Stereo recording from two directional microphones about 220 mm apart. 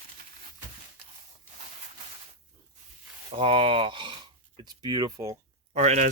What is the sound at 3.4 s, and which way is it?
Speech, 25° right (ahead or behind).